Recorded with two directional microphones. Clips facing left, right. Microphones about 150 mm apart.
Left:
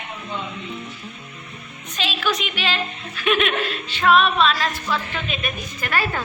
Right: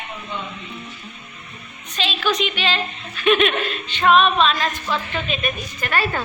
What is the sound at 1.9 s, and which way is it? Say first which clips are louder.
Speech: right 2 dB; 10° left (ahead or behind).